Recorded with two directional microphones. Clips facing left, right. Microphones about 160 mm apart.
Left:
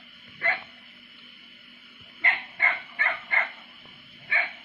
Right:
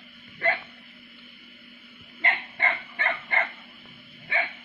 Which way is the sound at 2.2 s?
30° right (ahead or behind).